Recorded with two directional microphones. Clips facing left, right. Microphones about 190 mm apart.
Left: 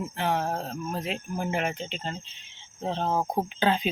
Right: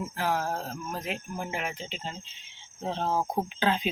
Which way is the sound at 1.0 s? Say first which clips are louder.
Left 4 dB; centre (ahead or behind).